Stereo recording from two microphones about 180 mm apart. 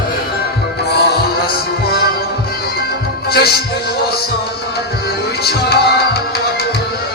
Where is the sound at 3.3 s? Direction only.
60° left (ahead or behind).